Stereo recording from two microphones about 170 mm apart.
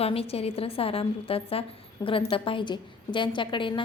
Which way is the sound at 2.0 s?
25° left (ahead or behind).